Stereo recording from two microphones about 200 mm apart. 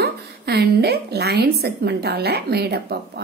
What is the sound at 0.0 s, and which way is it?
A woman's voice, 55° right (ahead or behind).